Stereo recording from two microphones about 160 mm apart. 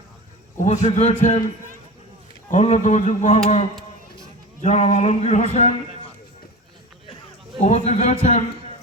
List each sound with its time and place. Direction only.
0.6 s a man's voice: 45° left (ahead or behind)
2.5 s a man's voice: 45° left (ahead or behind)
7.6 s a man's voice: 45° left (ahead or behind)